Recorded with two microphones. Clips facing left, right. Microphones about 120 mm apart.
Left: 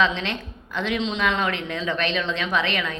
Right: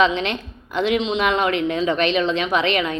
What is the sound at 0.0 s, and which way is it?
A woman's voice, 20° right (ahead or behind).